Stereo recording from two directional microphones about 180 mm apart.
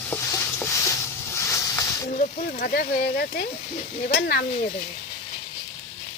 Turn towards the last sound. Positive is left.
turn(degrees=55)  # may be behind; listen again after turning